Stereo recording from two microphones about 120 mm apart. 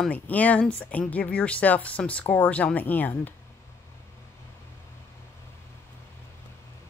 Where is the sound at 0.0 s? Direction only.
10° left (ahead or behind).